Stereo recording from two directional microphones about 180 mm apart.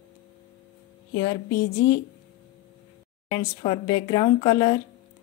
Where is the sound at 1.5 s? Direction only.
70° left (ahead or behind).